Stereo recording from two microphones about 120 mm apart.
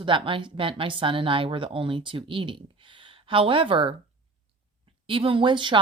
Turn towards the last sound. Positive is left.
turn(degrees=-40)  # may be behind; listen again after turning